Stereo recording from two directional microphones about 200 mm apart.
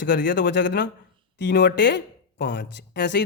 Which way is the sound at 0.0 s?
60° left (ahead or behind).